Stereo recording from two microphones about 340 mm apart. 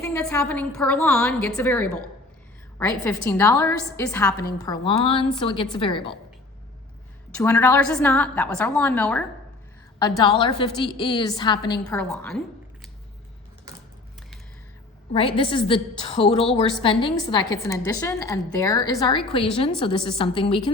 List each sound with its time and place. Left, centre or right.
0.0 s a woman's voice: centre
3.0 s a woman's voice: centre
7.3 s a woman's voice: centre
10.0 s a woman's voice: centre
15.1 s a woman's voice: centre
16.2 s a woman's voice: centre
16.8 s a woman's voice: centre